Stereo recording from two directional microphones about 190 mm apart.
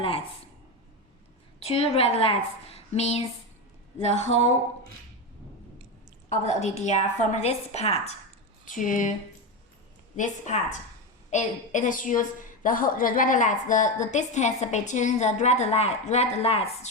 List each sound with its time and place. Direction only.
0.0 s speech: 30° left (ahead or behind)
1.6 s a woman's voice: 35° left (ahead or behind)
6.2 s a woman's voice: 35° left (ahead or behind)
8.6 s speech: 45° left (ahead or behind)
10.2 s a woman's voice: 40° left (ahead or behind)